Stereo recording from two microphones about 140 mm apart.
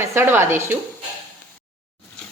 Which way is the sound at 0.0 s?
15° right (ahead or behind).